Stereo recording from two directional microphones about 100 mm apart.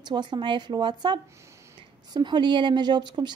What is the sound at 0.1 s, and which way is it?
A woman's voice, 50° right (ahead or behind).